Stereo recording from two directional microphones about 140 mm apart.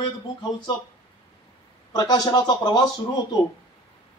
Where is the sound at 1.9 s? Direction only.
30° left (ahead or behind).